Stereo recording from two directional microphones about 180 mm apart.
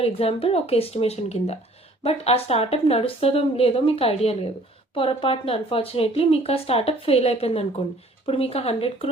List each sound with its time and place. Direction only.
0.0 s speech: 30° left (ahead or behind)